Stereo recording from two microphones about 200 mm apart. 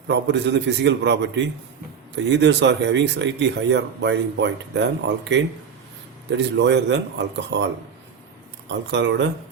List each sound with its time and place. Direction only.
0.1 s speech: 60° right (ahead or behind)
8.7 s speech: 65° right (ahead or behind)